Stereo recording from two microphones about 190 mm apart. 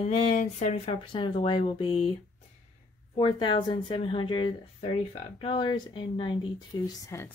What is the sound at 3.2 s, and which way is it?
Speech, 25° left (ahead or behind).